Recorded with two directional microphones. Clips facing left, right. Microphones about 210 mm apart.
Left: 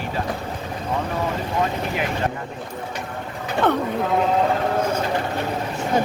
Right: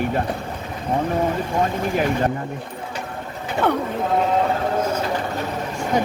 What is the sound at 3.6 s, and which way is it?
Speech, 10° right (ahead or behind).